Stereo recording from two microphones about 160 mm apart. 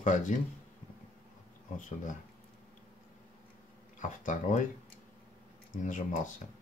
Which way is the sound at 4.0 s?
50° left (ahead or behind).